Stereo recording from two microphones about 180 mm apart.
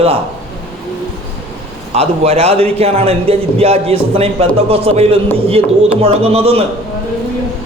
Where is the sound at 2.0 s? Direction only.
35° right (ahead or behind).